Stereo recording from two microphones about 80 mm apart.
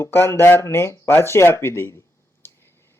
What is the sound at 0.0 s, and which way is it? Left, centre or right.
Speech, left.